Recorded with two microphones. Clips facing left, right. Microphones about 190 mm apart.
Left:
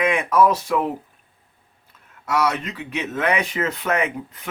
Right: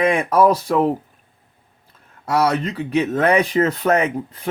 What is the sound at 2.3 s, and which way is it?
Speech, 35° right (ahead or behind).